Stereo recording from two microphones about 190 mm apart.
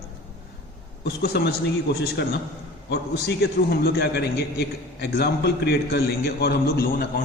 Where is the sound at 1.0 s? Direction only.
60° left (ahead or behind).